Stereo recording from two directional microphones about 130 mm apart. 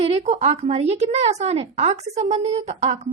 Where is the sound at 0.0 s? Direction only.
50° right (ahead or behind).